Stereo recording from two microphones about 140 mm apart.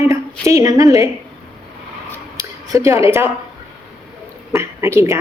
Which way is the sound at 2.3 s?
20° right (ahead or behind).